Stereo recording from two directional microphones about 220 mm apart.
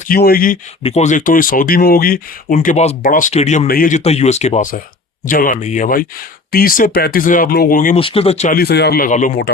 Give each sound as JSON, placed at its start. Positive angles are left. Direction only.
{"t": 0.1, "sound": "speech", "side_deg": 40}
{"t": 0.8, "sound": "speech", "side_deg": 30}
{"t": 7.9, "sound": "speech", "side_deg": 25}
{"t": 8.5, "sound": "speech", "side_deg": 45}